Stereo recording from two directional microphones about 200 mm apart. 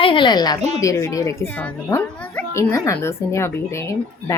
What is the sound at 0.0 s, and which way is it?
A woman's voice, 25° left (ahead or behind).